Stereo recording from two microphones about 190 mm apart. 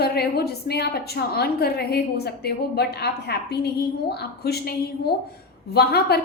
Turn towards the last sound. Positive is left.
turn(degrees=55)  # may be behind; listen again after turning